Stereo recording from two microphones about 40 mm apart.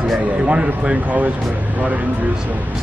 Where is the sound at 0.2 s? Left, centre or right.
Right.